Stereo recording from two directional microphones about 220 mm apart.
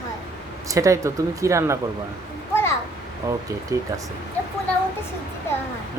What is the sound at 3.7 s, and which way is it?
Speech, 15° right (ahead or behind).